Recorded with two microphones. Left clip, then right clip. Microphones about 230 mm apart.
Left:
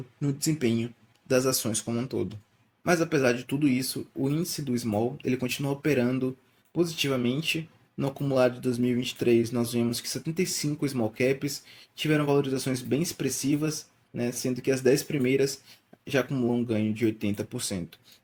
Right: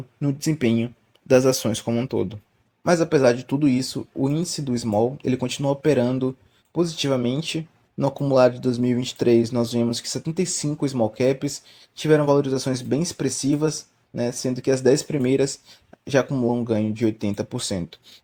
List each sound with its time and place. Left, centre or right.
0.2 s speech: right